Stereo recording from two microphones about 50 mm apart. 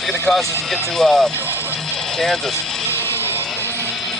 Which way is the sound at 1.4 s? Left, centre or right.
Left.